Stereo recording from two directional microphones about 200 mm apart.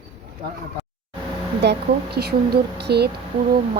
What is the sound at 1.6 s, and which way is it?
Speech, 55° right (ahead or behind).